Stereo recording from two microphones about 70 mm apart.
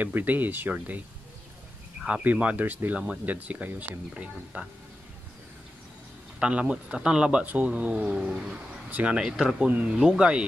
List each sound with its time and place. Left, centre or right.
0.0 s speech: right
2.0 s speech: centre
6.4 s speech: centre